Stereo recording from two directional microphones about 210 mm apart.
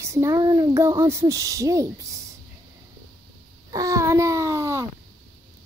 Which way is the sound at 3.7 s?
15° right (ahead or behind).